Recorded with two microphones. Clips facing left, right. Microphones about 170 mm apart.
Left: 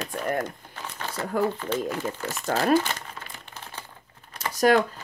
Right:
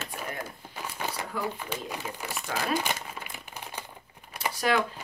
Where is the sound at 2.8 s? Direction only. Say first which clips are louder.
Left 5 dB; 10° right (ahead or behind).